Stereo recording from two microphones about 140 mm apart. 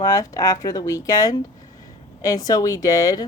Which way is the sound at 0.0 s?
25° left (ahead or behind).